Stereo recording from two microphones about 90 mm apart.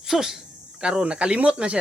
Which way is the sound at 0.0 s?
5° right (ahead or behind).